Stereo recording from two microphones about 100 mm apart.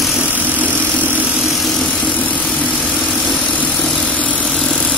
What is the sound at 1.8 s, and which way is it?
Vehicle, 15° left (ahead or behind).